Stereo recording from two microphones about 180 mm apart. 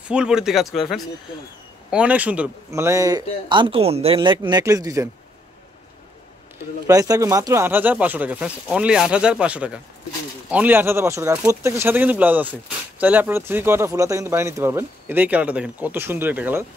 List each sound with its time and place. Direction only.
0.1 s speech: 5° right (ahead or behind)
6.9 s speech: 20° right (ahead or behind)